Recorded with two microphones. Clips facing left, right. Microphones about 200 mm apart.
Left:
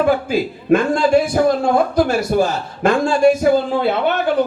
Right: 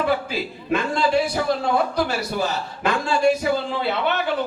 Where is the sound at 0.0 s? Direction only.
50° left (ahead or behind).